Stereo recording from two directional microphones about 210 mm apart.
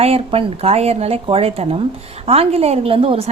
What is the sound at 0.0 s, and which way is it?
A woman's voice, 25° right (ahead or behind).